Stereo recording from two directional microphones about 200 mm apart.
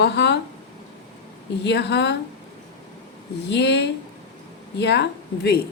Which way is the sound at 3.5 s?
60° left (ahead or behind).